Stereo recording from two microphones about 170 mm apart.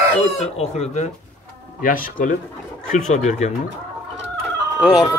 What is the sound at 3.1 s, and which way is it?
Speech, 45° left (ahead or behind).